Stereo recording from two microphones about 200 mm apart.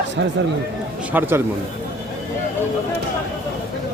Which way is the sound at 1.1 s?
10° right (ahead or behind).